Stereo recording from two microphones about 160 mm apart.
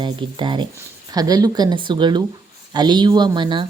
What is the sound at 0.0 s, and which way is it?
A woman's voice, 30° right (ahead or behind).